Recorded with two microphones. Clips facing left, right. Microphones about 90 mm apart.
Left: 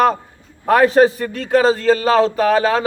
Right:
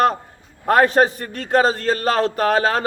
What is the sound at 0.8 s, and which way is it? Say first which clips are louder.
A man's voice: left 4 dB; 50° right (ahead or behind).